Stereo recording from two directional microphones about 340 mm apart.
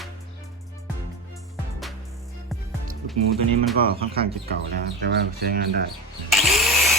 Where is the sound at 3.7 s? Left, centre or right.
Right.